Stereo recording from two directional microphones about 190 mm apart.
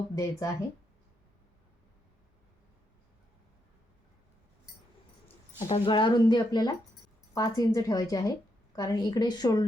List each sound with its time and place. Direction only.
0.2 s speech: 15° left (ahead or behind)
5.5 s speech: 35° left (ahead or behind)